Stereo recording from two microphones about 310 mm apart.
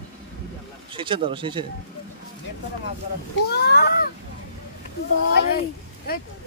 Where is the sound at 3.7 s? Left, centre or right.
Left.